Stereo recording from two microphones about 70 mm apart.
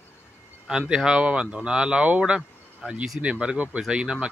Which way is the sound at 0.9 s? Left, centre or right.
Centre.